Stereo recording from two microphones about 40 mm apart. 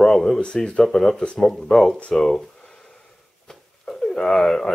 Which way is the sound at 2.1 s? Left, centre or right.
Centre.